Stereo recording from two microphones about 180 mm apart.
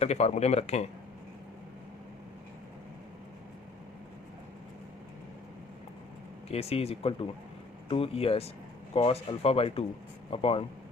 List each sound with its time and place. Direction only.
0.0 s speech: 35° left (ahead or behind)
6.5 s speech: 35° left (ahead or behind)